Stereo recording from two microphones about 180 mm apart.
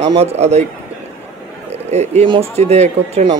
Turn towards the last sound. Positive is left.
turn(degrees=-35)  # may be behind; listen again after turning